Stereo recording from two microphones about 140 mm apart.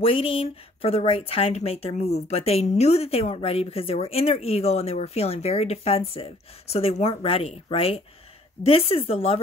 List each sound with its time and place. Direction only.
0.0 s speech: 45° left (ahead or behind)